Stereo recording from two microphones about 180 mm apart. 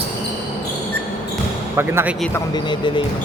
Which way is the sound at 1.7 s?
10° right (ahead or behind).